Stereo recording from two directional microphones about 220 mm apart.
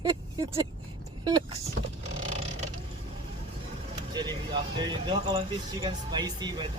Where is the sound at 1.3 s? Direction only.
20° right (ahead or behind).